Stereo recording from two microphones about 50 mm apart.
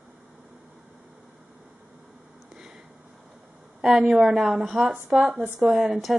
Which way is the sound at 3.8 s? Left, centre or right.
Centre.